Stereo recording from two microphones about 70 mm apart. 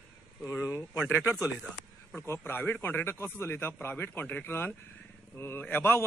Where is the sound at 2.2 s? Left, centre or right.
Left.